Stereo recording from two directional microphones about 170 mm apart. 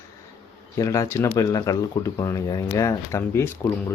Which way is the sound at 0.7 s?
20° left (ahead or behind).